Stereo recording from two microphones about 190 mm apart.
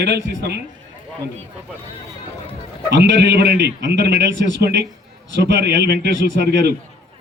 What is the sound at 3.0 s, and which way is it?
A man's voice, 65° right (ahead or behind).